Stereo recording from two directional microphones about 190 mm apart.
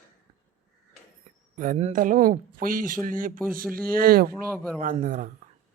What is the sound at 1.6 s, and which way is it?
Speech, 40° right (ahead or behind).